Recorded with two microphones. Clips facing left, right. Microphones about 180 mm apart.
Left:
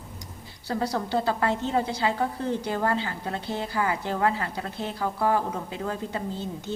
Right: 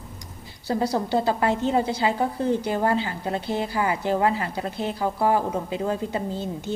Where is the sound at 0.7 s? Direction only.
15° right (ahead or behind).